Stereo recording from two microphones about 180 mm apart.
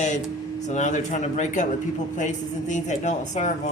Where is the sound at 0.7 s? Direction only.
45° left (ahead or behind).